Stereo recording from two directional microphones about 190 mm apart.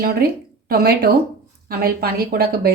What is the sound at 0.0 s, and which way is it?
A woman's voice, 55° right (ahead or behind).